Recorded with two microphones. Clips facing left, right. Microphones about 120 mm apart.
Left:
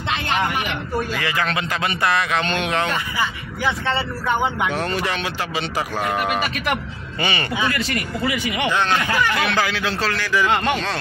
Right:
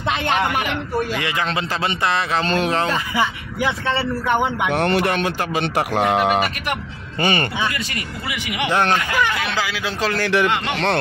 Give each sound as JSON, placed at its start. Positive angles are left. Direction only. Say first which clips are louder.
{"t": 1.1, "sound": "speech", "louder": "even", "side_deg": -25}
{"t": 4.6, "sound": "speech", "louder": "right 4 dB", "side_deg": -65}
{"t": 7.2, "sound": "speech", "louder": "right 4 dB", "side_deg": -45}
{"t": 9.4, "sound": "speech", "louder": "left 3 dB", "side_deg": 0}
{"t": 9.8, "sound": "speech", "louder": "even", "side_deg": -15}
{"t": 10.1, "sound": "speech", "louder": "right 3 dB", "side_deg": -60}